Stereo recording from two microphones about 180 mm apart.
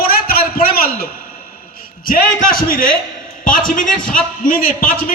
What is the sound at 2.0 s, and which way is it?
Speech, 55° left (ahead or behind).